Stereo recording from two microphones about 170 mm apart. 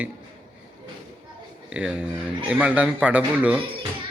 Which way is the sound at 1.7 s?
5° right (ahead or behind).